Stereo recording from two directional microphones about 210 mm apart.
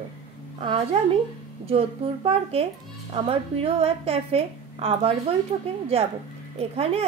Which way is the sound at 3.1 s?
25° right (ahead or behind).